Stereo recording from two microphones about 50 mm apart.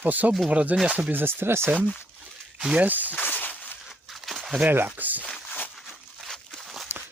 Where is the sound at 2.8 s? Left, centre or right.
Right.